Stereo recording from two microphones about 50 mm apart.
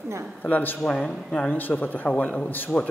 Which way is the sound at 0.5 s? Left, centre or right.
Left.